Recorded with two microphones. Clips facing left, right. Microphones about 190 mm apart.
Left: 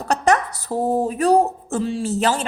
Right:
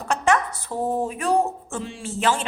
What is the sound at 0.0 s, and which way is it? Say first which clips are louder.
A woman's voice: left 3 dB; 40° left (ahead or behind).